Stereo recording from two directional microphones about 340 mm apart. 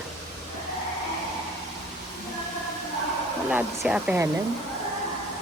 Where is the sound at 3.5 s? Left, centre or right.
Centre.